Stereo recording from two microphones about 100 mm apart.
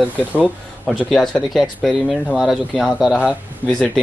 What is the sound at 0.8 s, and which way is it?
Speech, 5° left (ahead or behind).